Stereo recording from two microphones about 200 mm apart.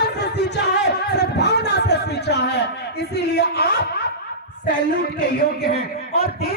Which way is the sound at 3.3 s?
50° left (ahead or behind).